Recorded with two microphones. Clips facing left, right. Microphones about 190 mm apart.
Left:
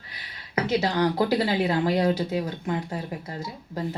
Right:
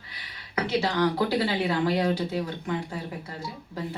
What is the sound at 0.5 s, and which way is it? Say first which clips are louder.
Speech: left 2 dB; 40° left (ahead or behind).